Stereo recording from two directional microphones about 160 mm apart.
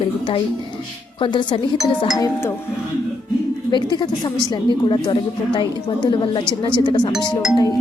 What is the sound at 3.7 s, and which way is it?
A woman's voice, 30° left (ahead or behind).